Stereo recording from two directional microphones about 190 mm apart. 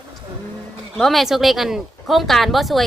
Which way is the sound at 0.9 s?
Centre (ahead or behind).